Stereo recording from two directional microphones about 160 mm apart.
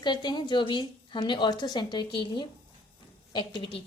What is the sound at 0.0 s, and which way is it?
A woman's voice, 25° left (ahead or behind).